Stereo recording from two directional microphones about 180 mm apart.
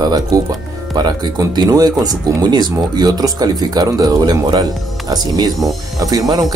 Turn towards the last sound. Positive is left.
turn(degrees=-20)  # may be behind; listen again after turning